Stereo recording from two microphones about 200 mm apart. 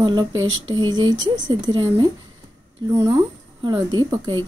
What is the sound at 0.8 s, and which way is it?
A woman's voice, 25° right (ahead or behind).